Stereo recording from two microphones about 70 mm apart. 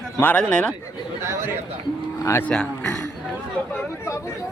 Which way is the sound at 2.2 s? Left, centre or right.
Left.